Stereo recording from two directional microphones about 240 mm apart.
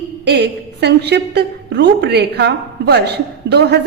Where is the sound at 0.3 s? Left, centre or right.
Right.